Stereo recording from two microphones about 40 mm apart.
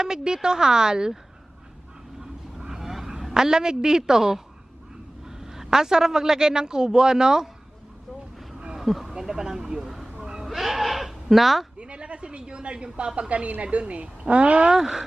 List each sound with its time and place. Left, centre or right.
0.0 s speech: centre
2.2 s a sound: centre
5.2 s a man's voice: centre
8.8 s a sound: centre
9.1 s speech: centre
10.2 s a sound: centre
10.4 s bleat: centre
11.8 s a woman's voice: right
14.7 s speech: centre